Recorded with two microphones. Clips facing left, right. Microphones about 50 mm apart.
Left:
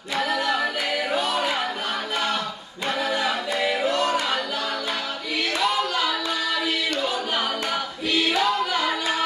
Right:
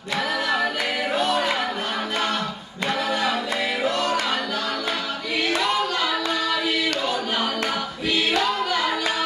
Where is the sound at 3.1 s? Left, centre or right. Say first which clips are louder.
Right 1 dB; centre.